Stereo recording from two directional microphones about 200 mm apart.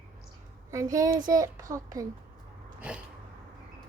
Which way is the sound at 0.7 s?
15° right (ahead or behind).